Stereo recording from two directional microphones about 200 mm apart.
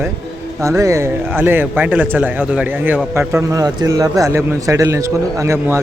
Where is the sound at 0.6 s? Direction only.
15° right (ahead or behind).